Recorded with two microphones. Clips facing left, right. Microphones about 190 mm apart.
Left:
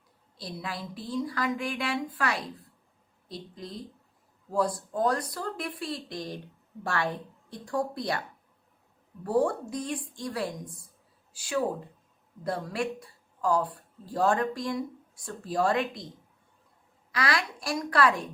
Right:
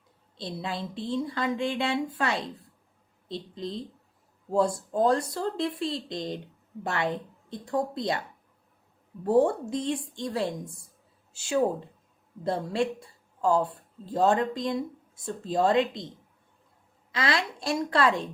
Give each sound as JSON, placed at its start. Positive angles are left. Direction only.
{"t": 0.3, "sound": "speech", "side_deg": -25}
{"t": 9.2, "sound": "a woman's voice", "side_deg": -25}
{"t": 17.1, "sound": "speech", "side_deg": -25}